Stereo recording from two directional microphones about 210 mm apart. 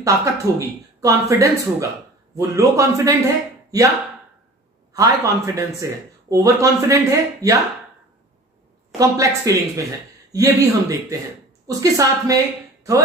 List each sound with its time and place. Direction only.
0.0 s speech: 15° right (ahead or behind)
4.9 s speech: 15° right (ahead or behind)
8.9 s speech: 15° right (ahead or behind)